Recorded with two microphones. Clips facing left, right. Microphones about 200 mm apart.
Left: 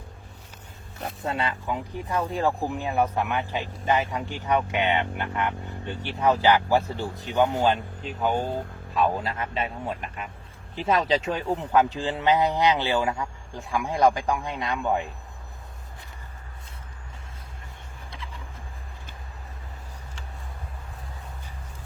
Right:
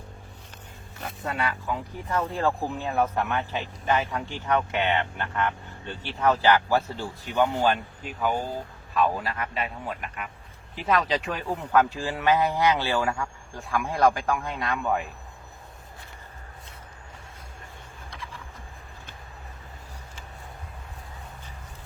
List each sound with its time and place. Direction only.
1.2 s a man's voice: 25° left (ahead or behind)